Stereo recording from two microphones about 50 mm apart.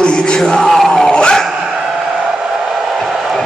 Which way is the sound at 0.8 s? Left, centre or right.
Centre.